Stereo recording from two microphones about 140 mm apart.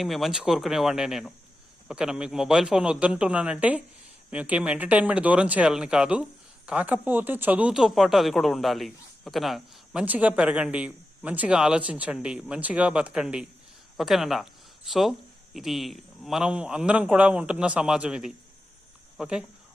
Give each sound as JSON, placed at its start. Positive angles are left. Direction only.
{"t": 0.0, "sound": "a man's voice", "side_deg": 0}